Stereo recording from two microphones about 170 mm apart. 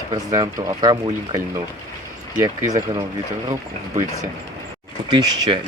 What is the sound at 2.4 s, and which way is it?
Speech, 20° right (ahead or behind).